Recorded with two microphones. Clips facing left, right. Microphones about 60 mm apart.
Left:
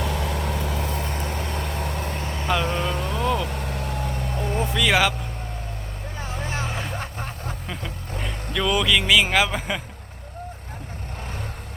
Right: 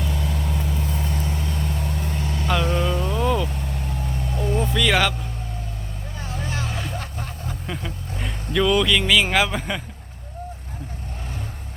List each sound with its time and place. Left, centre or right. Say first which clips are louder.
0.0 s vehicle: left 2 dB; left
1.1 s vehicle: even; left
2.2 s vehicle: right 2 dB; left
2.9 s vehicle: right 2 dB; left
3.2 s music: right 1 dB; centre
3.5 s vehicle: left 2 dB; left
4.4 s vehicle: right 3 dB; left
4.7 s vehicle: left 1 dB; centre
6.1 s vehicle: even; left
8.2 s speech: right 4 dB; centre